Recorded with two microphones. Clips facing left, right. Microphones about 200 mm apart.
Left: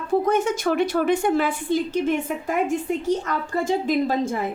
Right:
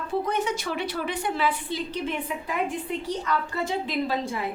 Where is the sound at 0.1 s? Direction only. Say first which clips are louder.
Left 7 dB; 45° left (ahead or behind).